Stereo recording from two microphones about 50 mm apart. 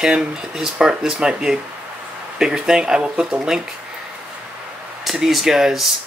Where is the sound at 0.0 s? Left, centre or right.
Centre.